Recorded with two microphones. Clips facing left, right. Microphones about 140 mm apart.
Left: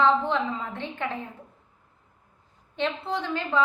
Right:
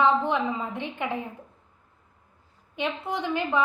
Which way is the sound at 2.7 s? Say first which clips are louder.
Left 1 dB; 15° right (ahead or behind).